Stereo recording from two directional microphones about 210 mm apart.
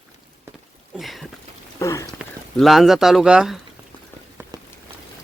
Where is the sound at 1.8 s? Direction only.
15° left (ahead or behind).